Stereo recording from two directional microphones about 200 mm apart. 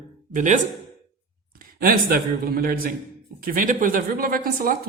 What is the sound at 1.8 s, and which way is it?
Speech, 45° right (ahead or behind).